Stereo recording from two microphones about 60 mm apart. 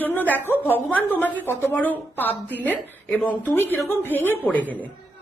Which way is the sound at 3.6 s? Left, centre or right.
Left.